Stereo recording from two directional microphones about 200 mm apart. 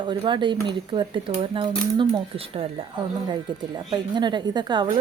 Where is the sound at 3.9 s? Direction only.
20° right (ahead or behind).